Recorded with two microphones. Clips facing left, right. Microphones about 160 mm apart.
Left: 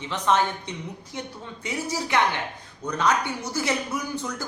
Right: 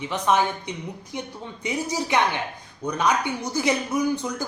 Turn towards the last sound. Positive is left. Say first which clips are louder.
# right 6 dB
turn(degrees=-15)  # may be behind; listen again after turning